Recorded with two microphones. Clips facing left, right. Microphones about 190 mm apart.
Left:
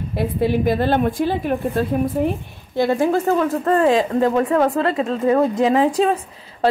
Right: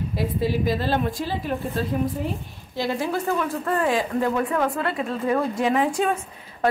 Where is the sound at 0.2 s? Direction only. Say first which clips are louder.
Left 6 dB; 60° left (ahead or behind).